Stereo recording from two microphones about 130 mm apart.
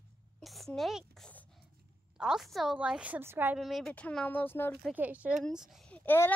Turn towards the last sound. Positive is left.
turn(degrees=15)  # may be behind; listen again after turning